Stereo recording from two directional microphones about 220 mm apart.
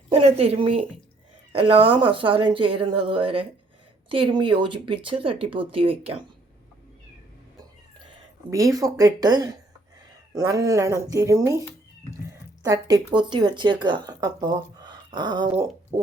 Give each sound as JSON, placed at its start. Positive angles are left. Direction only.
{"t": 0.1, "sound": "speech", "side_deg": -30}
{"t": 8.7, "sound": "speech", "side_deg": -15}
{"t": 12.6, "sound": "speech", "side_deg": -15}
{"t": 15.9, "sound": "hoot", "side_deg": -15}